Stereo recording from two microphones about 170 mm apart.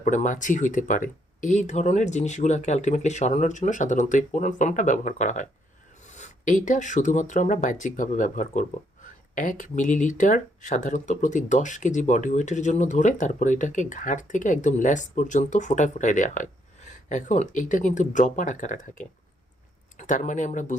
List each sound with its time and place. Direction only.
0.0 s speech: 45° left (ahead or behind)